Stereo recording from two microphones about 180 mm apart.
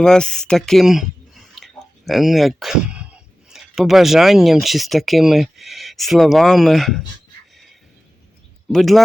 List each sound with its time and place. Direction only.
0.0 s speech: 5° left (ahead or behind)
8.7 s speech: centre (ahead or behind)